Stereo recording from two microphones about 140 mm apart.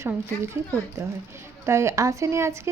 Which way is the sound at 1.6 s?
20° right (ahead or behind).